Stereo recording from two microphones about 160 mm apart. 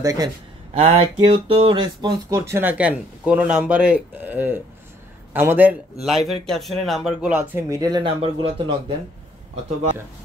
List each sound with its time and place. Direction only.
0.0 s speech: 20° right (ahead or behind)
0.7 s speech: 35° right (ahead or behind)
2.5 s speech: 10° right (ahead or behind)
6.0 s speech: centre (ahead or behind)
7.7 s speech: 25° right (ahead or behind)